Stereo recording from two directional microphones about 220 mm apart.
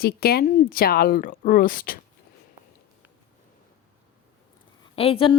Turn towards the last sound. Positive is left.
turn(degrees=25)  # may be behind; listen again after turning